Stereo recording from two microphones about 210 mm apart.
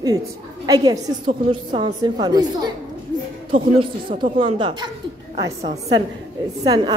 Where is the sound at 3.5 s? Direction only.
25° right (ahead or behind).